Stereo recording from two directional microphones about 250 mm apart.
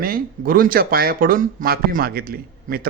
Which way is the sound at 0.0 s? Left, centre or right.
Right.